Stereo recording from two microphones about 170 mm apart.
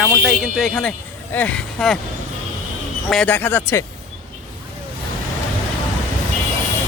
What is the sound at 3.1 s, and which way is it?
Speech, 10° left (ahead or behind).